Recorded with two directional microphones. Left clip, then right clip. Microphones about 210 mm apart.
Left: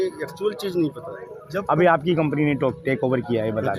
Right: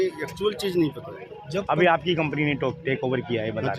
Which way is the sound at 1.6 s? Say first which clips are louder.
Left 3 dB; 35° left (ahead or behind).